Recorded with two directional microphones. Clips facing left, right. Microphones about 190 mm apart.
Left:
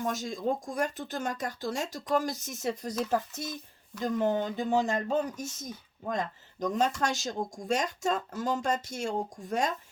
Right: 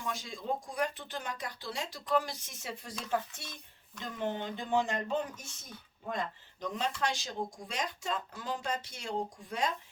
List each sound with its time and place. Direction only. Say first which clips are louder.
0.0 s speech: left 8 dB; 45° left (ahead or behind)